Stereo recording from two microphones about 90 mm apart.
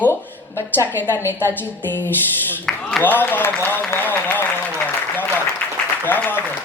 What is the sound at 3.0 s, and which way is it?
A woman's voice, 20° left (ahead or behind).